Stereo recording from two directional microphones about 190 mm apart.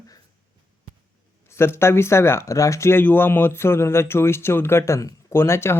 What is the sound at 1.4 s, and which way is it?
Speech, 15° left (ahead or behind).